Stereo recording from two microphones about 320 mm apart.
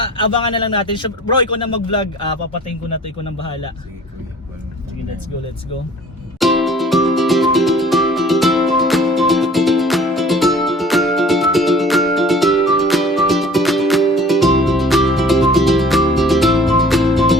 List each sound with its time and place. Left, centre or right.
0.0 s a man's voice: centre
6.4 s music: centre